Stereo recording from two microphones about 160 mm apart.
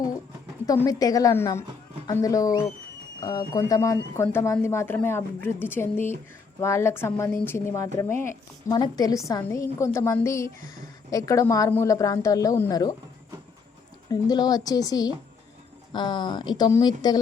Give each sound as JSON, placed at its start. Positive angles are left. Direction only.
{"t": 0.6, "sound": "a woman's voice", "side_deg": 20}
{"t": 14.1, "sound": "a woman's voice", "side_deg": 25}